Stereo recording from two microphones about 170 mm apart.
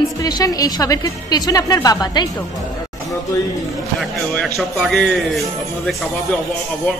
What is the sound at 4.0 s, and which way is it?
Speech, centre (ahead or behind).